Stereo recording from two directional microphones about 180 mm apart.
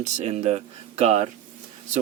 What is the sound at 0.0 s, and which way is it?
Speech, 40° right (ahead or behind).